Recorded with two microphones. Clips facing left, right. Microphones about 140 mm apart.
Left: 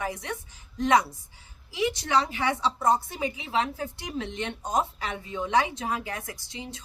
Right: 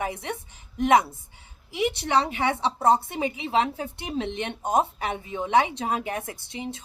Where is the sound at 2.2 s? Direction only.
20° right (ahead or behind).